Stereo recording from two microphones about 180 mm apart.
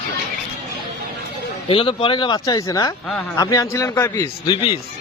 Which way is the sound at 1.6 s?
25° left (ahead or behind).